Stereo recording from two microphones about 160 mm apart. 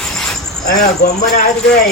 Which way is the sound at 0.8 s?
80° left.